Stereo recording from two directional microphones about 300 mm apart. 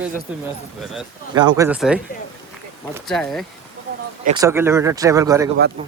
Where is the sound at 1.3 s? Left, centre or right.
Centre.